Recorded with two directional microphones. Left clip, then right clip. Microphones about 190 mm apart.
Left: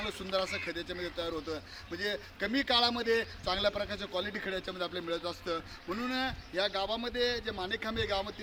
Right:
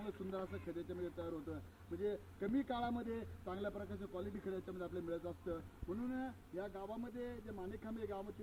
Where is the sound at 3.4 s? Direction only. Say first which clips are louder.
Left 14 dB; 40° left (ahead or behind).